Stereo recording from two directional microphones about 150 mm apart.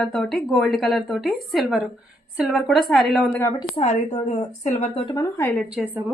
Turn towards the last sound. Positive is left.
turn(degrees=-10)  # may be behind; listen again after turning